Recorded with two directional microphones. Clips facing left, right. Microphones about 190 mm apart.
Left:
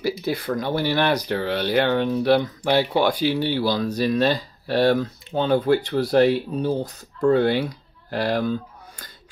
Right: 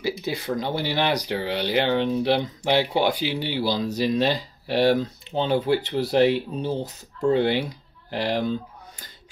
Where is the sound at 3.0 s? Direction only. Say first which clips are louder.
Left 3 dB; 45° left (ahead or behind).